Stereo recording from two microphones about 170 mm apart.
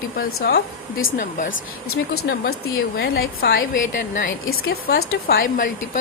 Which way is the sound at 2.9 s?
70° left (ahead or behind).